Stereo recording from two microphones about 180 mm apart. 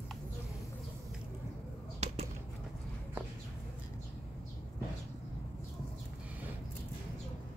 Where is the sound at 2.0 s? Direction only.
35° right (ahead or behind).